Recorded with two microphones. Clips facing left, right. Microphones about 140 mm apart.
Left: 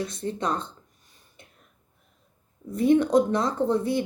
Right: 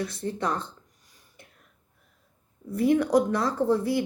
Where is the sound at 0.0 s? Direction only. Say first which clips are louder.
Even; 25° left (ahead or behind).